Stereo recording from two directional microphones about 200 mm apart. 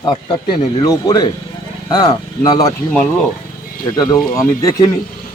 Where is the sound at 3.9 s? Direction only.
20° left (ahead or behind).